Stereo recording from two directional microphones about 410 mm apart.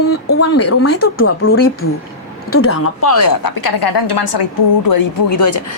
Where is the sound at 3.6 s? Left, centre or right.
Left.